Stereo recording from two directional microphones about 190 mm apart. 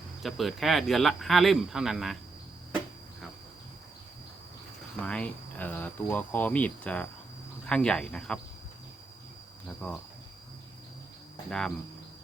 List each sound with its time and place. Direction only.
0.2 s speech: centre (ahead or behind)
5.0 s cricket: 5° left (ahead or behind)
7.7 s speech: 5° left (ahead or behind)
11.4 s speech: 5° left (ahead or behind)